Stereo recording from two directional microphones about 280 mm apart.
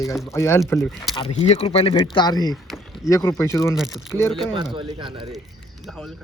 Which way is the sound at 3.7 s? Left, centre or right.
Centre.